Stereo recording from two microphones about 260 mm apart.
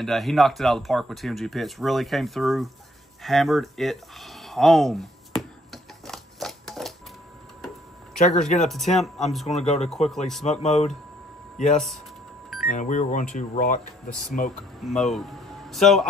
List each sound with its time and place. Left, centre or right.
0.0 s speech: centre
3.2 s a sound: centre
8.4 s speech: centre
9.5 s speech: left
10.0 s speech: centre
10.4 s speech: left
11.7 s speech: centre
12.6 s speech: left
15.0 s speech: centre